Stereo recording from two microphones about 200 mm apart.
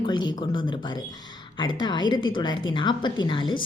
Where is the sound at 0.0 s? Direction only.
20° left (ahead or behind).